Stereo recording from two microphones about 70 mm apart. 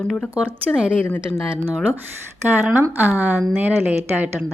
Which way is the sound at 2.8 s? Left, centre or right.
Right.